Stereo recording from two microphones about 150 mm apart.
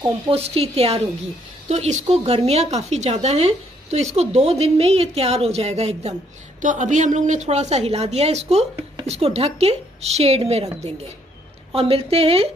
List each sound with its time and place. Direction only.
0.3 s a woman's voice: 40° right (ahead or behind)
6.6 s a woman's voice: 60° right (ahead or behind)
11.7 s a woman's voice: 40° right (ahead or behind)